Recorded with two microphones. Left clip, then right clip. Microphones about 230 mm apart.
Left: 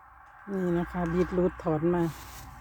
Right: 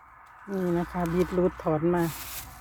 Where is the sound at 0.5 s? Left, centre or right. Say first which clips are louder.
Right 1 dB; centre.